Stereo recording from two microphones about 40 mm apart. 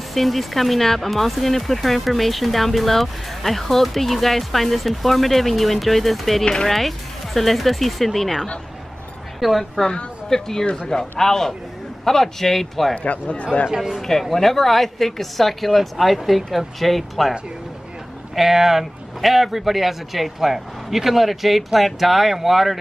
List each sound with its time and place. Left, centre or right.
0.1 s speech: centre
6.4 s speech: centre
6.7 s speech: centre
10.3 s speech: centre
12.9 s speech: left
13.7 s speech: centre
14.3 s speech: centre
18.3 s speech: centre